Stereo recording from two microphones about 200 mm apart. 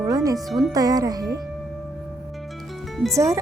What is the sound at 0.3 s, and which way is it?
Speech, centre (ahead or behind).